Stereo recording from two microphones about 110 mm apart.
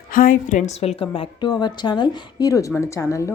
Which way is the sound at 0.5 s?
80° left.